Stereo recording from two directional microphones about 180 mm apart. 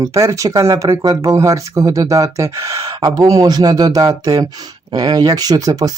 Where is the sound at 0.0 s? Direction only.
15° right (ahead or behind).